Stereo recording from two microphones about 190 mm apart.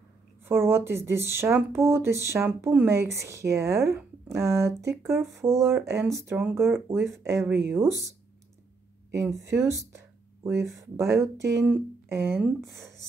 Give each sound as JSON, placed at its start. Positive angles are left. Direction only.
{"t": 0.5, "sound": "speech", "side_deg": -10}
{"t": 9.1, "sound": "speech", "side_deg": -15}